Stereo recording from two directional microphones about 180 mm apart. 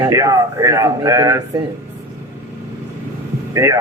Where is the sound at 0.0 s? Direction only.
20° right (ahead or behind).